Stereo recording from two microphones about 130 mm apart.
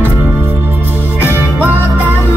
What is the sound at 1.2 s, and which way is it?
Music, 15° right (ahead or behind).